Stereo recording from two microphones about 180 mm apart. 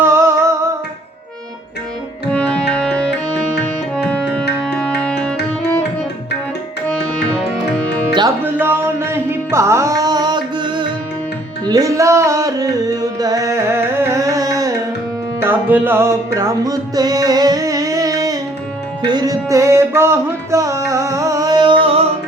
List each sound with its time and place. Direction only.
0.0 s music: 15° right (ahead or behind)
2.3 s music: 5° left (ahead or behind)
8.4 s carnatic music: 10° right (ahead or behind)
11.6 s music: 20° right (ahead or behind)